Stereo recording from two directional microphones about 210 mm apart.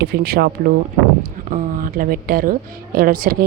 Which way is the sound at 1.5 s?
40° right (ahead or behind).